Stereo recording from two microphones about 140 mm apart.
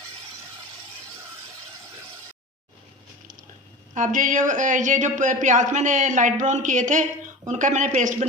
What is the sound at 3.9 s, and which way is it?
Speech, 65° right (ahead or behind).